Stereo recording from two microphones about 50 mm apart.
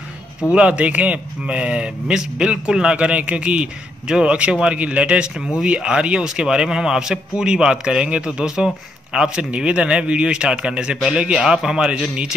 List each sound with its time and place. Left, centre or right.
0.5 s a man's voice: right